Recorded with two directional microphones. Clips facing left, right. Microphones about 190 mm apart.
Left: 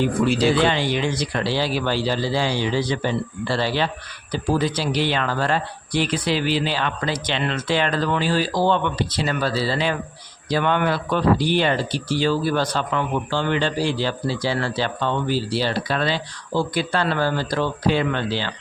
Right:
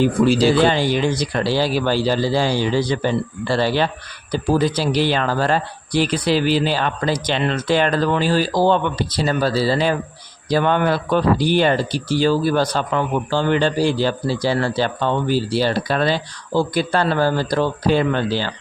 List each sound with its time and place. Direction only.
0.0 s speech: 35° right (ahead or behind)